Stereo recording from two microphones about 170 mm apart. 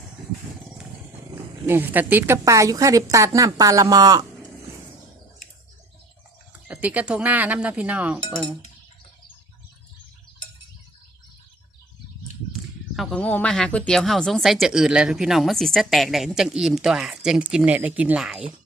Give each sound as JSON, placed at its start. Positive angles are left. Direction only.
{"t": 1.6, "sound": "a woman's voice", "side_deg": -10}
{"t": 6.7, "sound": "speech", "side_deg": -10}
{"t": 13.0, "sound": "speech", "side_deg": 5}